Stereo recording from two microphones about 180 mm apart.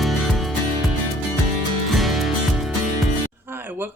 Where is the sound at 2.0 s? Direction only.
Centre (ahead or behind).